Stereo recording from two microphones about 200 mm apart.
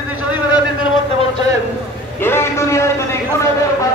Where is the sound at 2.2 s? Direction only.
10° left (ahead or behind).